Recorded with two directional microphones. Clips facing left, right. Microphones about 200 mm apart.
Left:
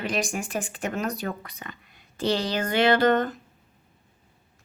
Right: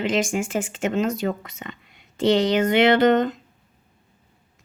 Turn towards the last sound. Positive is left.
turn(degrees=-20)  # may be behind; listen again after turning